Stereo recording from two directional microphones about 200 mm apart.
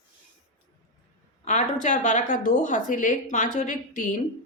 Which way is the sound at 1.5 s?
40° left (ahead or behind).